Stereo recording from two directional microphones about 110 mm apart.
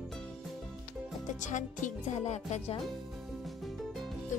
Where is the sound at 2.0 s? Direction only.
90° left.